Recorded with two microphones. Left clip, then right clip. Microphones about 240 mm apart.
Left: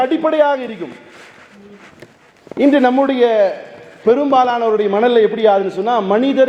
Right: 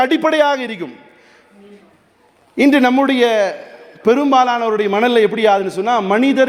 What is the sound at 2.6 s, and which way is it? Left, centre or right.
A man's voice, right.